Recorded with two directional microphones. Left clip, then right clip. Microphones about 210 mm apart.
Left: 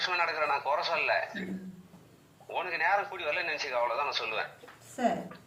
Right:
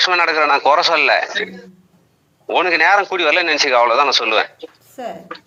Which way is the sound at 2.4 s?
55° right (ahead or behind).